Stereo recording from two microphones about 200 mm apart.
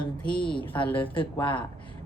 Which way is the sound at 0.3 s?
25° left (ahead or behind).